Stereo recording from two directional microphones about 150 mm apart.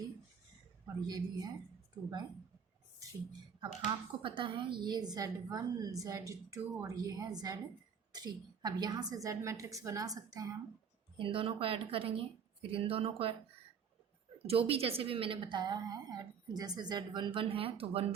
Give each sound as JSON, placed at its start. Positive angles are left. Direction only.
{"t": 1.0, "sound": "a woman's voice", "side_deg": -25}
{"t": 3.8, "sound": "a woman's voice", "side_deg": -35}
{"t": 11.2, "sound": "a woman's voice", "side_deg": -35}
{"t": 14.3, "sound": "a woman's voice", "side_deg": -40}